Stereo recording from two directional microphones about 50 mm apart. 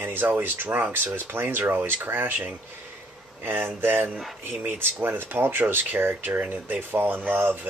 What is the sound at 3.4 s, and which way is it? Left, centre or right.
Speech, right.